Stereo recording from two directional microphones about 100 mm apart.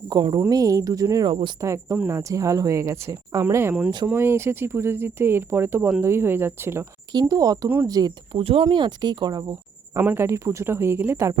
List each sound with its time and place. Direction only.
0.1 s speech: 45° right (ahead or behind)
1.3 s speech: 60° right (ahead or behind)
1.6 s speech: 30° right (ahead or behind)
7.1 s speech: 45° right (ahead or behind)
8.3 s speech: 65° right (ahead or behind)
8.6 s speech: 45° right (ahead or behind)
9.9 s speech: 25° right (ahead or behind)